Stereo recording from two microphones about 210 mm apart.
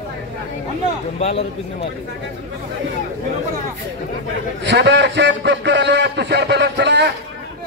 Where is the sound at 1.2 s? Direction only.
30° left (ahead or behind).